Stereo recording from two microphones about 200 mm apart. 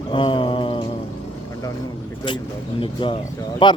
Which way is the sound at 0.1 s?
25° left (ahead or behind).